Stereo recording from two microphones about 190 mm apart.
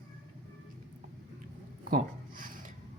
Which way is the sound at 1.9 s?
45° right (ahead or behind).